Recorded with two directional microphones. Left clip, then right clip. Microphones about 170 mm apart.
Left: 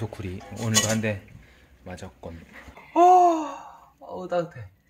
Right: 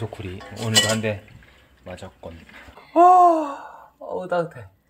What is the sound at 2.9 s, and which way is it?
Babbling, 15° right (ahead or behind).